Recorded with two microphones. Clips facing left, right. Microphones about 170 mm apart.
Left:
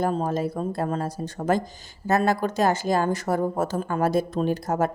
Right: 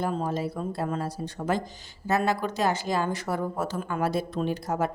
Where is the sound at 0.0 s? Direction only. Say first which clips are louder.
Left 4 dB; 45° left (ahead or behind).